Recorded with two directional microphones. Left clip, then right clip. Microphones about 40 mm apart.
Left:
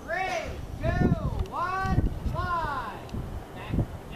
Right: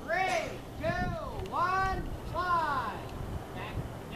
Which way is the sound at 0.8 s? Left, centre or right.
Centre.